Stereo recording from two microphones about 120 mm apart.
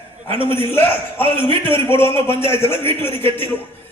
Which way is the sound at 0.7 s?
20° left (ahead or behind).